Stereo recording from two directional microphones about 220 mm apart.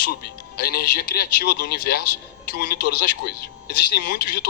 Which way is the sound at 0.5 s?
45° left (ahead or behind).